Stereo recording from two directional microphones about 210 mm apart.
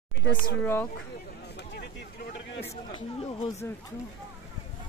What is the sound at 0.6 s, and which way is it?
Speech, 10° left (ahead or behind).